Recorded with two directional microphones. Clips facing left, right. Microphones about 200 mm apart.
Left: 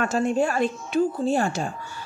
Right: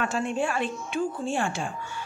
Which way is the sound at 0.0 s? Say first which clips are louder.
Left 5 dB; 40° left (ahead or behind).